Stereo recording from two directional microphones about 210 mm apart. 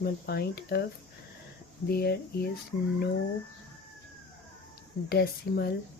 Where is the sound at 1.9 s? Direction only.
50° left (ahead or behind).